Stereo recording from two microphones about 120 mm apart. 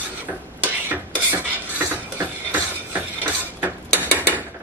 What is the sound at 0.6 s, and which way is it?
Filing, 15° right (ahead or behind).